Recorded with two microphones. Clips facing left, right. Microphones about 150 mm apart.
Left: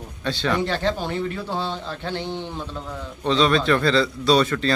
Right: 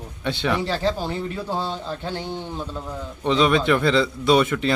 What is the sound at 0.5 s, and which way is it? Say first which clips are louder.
A man's voice: left 1 dB; 5° right (ahead or behind).